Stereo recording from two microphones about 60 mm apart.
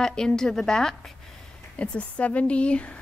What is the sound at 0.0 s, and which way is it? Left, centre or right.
A woman's voice, centre.